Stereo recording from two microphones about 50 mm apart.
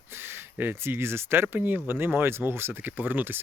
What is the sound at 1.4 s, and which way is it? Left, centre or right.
Speech, right.